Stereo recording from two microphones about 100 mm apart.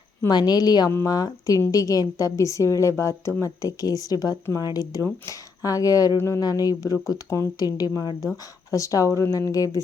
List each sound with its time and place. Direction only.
0.3 s a woman's voice: 40° left (ahead or behind)
0.9 s speech: 30° left (ahead or behind)
6.4 s speech: 40° left (ahead or behind)